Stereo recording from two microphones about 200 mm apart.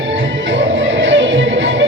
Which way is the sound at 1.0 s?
65° right (ahead or behind).